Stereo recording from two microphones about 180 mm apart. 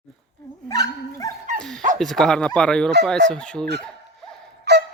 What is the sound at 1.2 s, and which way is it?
Dog, 20° left (ahead or behind).